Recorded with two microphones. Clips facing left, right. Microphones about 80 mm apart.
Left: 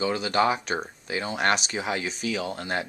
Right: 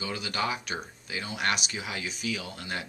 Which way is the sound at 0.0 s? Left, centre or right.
Left.